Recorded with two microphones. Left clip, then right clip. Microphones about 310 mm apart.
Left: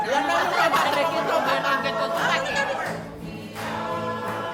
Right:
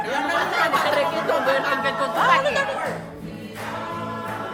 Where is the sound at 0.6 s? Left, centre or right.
Centre.